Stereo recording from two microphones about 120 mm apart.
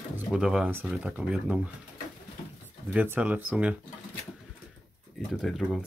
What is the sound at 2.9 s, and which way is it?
Speech, 15° right (ahead or behind).